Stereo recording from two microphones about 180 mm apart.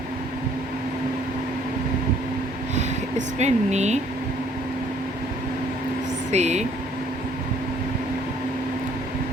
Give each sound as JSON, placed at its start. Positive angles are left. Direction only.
{"t": 2.7, "sound": "speech", "side_deg": -40}
{"t": 6.3, "sound": "speech", "side_deg": -40}